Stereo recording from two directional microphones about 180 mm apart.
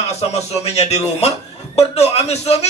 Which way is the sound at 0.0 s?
35° left (ahead or behind).